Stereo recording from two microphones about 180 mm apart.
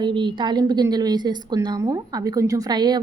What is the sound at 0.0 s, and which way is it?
A woman's voice, 25° right (ahead or behind).